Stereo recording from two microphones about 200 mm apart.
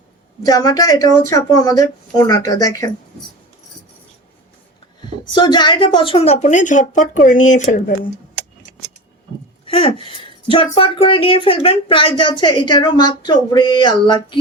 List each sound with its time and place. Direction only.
0.4 s speech: 20° left (ahead or behind)
5.3 s a woman's voice: 20° left (ahead or behind); by 7.9 s 40° left (ahead or behind)
9.6 s speech: 30° left (ahead or behind)